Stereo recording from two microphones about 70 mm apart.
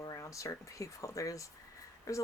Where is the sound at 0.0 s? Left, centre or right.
Left.